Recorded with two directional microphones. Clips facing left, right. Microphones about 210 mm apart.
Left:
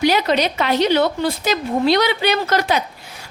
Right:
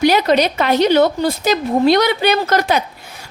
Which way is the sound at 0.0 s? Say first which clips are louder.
Right 3 dB; 45° right (ahead or behind).